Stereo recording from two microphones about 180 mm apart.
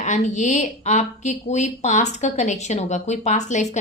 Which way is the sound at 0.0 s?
40° left (ahead or behind).